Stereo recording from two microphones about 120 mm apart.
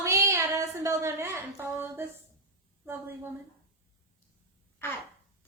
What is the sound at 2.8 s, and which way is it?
Speech, 20° right (ahead or behind).